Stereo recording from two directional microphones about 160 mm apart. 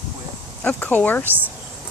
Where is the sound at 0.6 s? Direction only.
10° left (ahead or behind).